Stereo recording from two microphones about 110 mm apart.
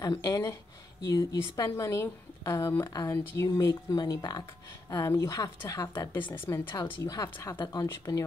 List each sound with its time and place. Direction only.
0.2 s speech: 30° left (ahead or behind)
6.1 s speech: 20° left (ahead or behind)
6.8 s speech: 30° left (ahead or behind)
7.5 s speech: 45° left (ahead or behind)
7.8 s speech: 30° left (ahead or behind)